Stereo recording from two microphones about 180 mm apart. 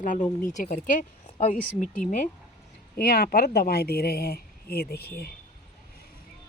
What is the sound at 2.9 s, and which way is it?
A woman's voice, 55° left (ahead or behind).